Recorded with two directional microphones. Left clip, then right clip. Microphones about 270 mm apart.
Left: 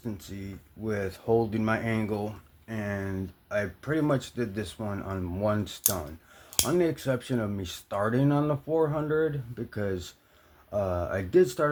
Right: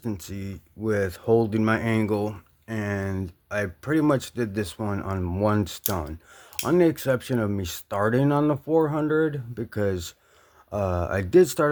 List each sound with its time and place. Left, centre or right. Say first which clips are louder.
0.0 s speech: right 5 dB; right